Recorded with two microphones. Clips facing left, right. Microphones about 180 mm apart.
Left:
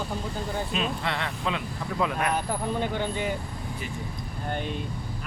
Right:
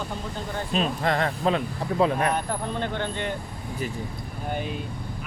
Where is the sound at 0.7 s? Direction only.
40° right (ahead or behind).